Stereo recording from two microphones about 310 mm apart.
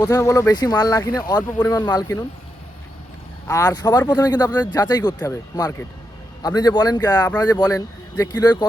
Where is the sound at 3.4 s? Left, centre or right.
Centre.